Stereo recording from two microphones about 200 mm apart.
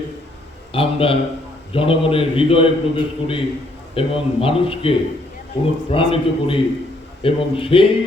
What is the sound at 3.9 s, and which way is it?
A man's voice, 25° left (ahead or behind).